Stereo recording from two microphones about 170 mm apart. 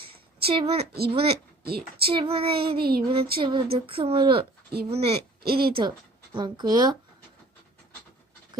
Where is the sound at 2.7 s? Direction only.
65° right (ahead or behind).